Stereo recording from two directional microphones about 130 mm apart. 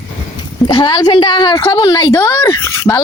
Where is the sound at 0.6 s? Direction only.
35° left (ahead or behind).